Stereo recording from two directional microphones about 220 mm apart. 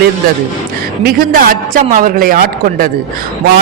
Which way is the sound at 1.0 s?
40° right (ahead or behind).